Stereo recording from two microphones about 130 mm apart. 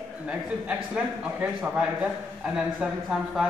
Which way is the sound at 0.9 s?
10° right (ahead or behind).